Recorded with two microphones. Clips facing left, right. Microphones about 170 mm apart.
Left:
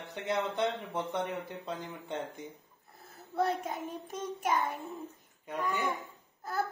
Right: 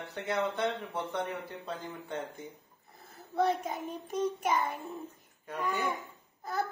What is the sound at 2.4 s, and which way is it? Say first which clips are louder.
A child's voice: even; centre (ahead or behind).